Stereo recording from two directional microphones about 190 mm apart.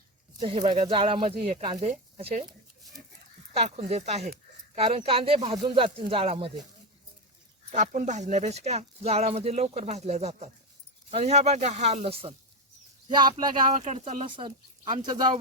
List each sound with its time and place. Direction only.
0.3 s speech: 25° right (ahead or behind); by 2.5 s 40° right (ahead or behind)
3.5 s speech: 35° right (ahead or behind)
7.7 s speech: 40° right (ahead or behind)
13.7 s speech: 35° right (ahead or behind)
14.3 s speech: 25° right (ahead or behind)